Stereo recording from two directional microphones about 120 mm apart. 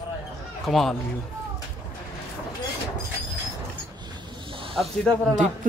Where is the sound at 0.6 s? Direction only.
Centre (ahead or behind).